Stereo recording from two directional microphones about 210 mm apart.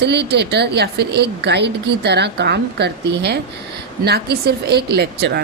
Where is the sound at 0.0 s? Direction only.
55° right (ahead or behind).